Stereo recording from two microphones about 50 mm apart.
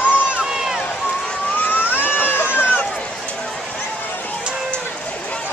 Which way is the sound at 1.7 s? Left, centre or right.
Left.